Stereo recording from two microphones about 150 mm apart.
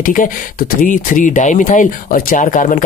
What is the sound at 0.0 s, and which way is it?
Speech, 65° left (ahead or behind).